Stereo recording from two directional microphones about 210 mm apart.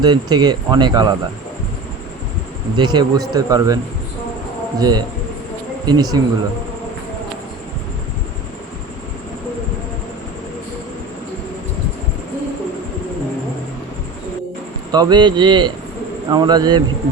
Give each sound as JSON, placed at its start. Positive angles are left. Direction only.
{"t": 0.0, "sound": "speech", "side_deg": -20}
{"t": 2.7, "sound": "speech", "side_deg": -20}
{"t": 4.8, "sound": "speech", "side_deg": -20}
{"t": 14.9, "sound": "speech", "side_deg": -20}